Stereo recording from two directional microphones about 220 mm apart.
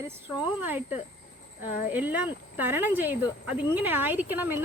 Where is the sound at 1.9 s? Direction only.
5° right (ahead or behind).